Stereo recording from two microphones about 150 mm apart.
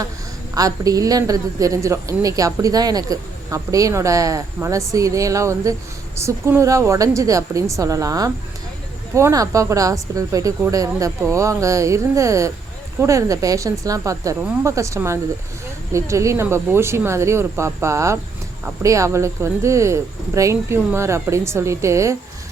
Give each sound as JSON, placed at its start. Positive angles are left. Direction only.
{"t": 0.5, "sound": "a woman's voice", "side_deg": -25}